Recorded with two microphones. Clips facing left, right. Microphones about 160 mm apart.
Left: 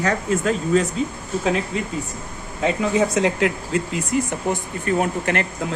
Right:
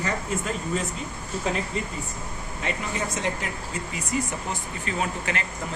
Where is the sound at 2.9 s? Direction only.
90° left; by 4.0 s 70° left (ahead or behind).